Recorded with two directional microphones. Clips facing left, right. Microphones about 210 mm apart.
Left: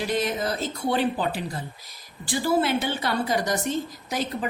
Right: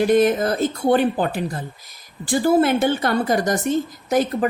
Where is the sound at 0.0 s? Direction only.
50° right (ahead or behind).